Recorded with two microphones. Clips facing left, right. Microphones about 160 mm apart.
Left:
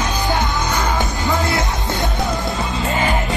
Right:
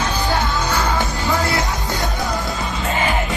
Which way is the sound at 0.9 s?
20° left (ahead or behind).